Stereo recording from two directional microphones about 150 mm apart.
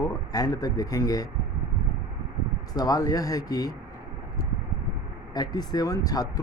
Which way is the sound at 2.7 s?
25° left (ahead or behind).